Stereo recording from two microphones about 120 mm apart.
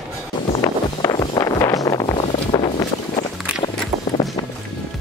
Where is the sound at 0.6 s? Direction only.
35° left (ahead or behind).